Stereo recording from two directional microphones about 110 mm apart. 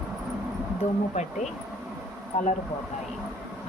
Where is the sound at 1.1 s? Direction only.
90° left.